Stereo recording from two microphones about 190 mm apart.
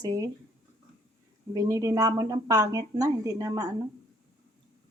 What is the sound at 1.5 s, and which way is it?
Speech, 15° right (ahead or behind).